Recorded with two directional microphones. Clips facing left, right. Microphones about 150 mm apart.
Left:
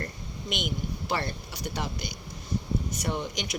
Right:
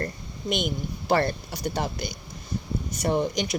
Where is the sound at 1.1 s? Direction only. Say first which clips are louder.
Right 9 dB; 55° right (ahead or behind).